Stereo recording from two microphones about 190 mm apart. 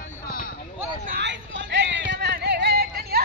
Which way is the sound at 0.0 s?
45° left (ahead or behind).